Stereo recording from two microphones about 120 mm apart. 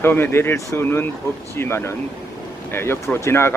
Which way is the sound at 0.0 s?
20° left (ahead or behind).